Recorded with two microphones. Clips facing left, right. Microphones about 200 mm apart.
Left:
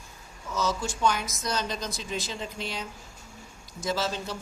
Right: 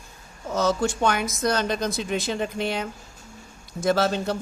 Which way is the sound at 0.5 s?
60° right (ahead or behind).